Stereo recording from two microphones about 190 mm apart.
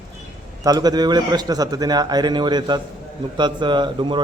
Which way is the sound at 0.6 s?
20° right (ahead or behind).